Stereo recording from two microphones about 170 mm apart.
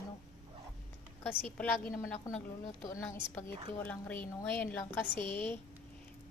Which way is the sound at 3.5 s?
30° right (ahead or behind).